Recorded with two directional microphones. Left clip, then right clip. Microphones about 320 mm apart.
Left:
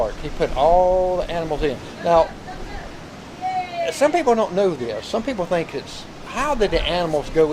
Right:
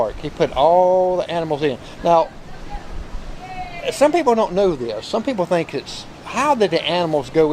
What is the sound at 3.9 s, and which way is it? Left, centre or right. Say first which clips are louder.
Speech: right 3 dB; right.